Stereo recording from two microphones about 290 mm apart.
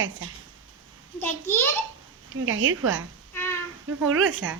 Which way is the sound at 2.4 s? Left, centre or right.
Right.